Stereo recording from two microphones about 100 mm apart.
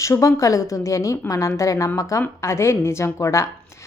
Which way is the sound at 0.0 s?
30° left (ahead or behind).